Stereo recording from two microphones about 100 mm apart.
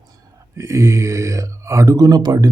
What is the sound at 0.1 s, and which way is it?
Speech, 30° right (ahead or behind).